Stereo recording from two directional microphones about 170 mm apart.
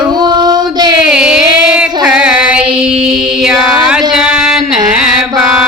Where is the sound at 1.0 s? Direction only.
5° right (ahead or behind).